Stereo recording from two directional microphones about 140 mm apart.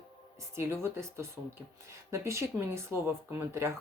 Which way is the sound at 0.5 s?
20° right (ahead or behind).